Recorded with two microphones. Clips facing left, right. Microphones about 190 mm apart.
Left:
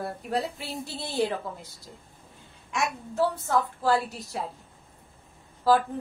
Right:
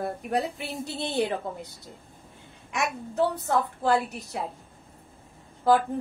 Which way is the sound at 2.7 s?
20° right (ahead or behind).